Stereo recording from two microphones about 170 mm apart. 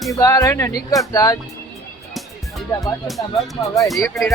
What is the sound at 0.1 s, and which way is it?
Speech, 20° left (ahead or behind).